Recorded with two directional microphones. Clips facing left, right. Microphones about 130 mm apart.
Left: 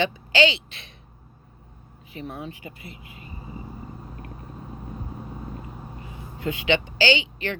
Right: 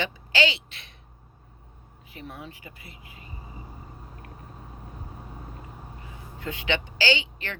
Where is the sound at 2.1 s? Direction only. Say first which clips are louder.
Left 6 dB; 25° left (ahead or behind).